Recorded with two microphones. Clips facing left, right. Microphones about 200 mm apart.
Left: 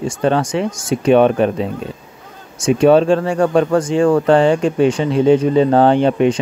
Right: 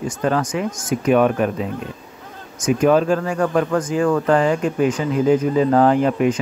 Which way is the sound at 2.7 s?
30° left (ahead or behind).